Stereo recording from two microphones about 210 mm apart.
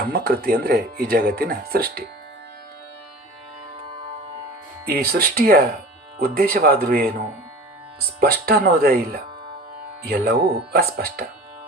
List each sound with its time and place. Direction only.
0.1 s speech: 45° right (ahead or behind)
4.9 s speech: 45° right (ahead or behind)
8.2 s speech: 45° right (ahead or behind)
10.2 s speech: 50° right (ahead or behind)